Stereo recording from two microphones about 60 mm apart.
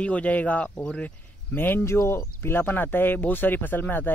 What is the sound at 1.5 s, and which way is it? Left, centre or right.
Speech, left.